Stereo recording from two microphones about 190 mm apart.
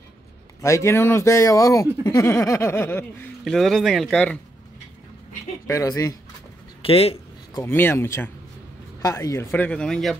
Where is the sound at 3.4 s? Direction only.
Centre (ahead or behind).